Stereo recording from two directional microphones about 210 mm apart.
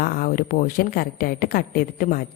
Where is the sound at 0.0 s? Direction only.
45° left (ahead or behind).